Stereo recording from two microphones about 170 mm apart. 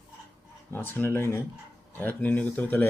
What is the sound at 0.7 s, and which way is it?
Speech, 10° left (ahead or behind).